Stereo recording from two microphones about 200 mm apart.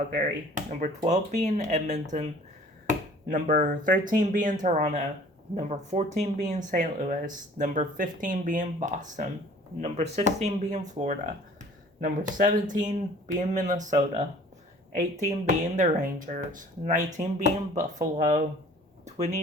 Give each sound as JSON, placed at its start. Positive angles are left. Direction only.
{"t": 0.1, "sound": "speech", "side_deg": -40}
{"t": 3.2, "sound": "speech", "side_deg": -40}
{"t": 19.0, "sound": "a sound", "side_deg": -35}